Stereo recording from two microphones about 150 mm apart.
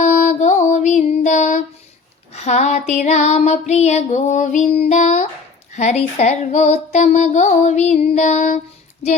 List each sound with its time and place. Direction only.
0.0 s music: 55° left (ahead or behind)
2.3 s female singing: 50° left (ahead or behind)